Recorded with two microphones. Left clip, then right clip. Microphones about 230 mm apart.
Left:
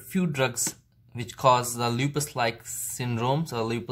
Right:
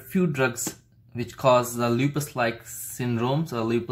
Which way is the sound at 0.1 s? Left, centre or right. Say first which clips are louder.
Right 3 dB; left.